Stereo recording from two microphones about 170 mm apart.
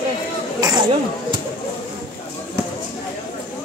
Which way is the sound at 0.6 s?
25° right (ahead or behind).